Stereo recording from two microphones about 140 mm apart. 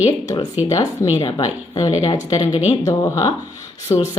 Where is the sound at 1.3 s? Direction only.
30° left (ahead or behind).